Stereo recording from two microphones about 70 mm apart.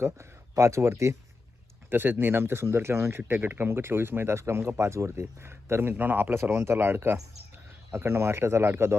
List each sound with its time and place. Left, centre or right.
0.0 s speech: right
1.9 s speech: right